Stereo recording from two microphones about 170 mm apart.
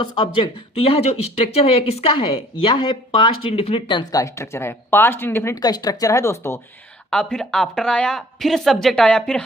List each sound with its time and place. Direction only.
0.3 s speech: 35° left (ahead or behind); by 6.6 s 15° left (ahead or behind)
7.1 s speech: 5° left (ahead or behind)